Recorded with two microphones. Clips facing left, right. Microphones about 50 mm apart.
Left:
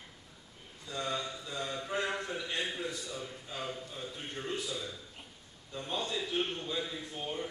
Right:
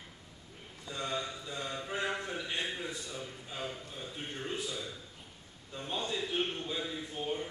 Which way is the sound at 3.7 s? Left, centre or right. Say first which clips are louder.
Left 2 dB; centre.